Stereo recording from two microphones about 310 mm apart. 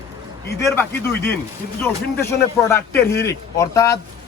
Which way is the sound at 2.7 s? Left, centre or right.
Centre.